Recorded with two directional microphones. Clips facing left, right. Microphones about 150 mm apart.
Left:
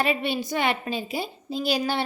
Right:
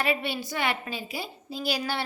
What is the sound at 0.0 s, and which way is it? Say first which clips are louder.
A woman's voice: left 3 dB; 20° left (ahead or behind).